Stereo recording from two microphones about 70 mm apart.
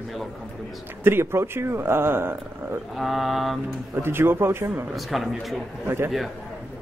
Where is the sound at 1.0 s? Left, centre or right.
Right.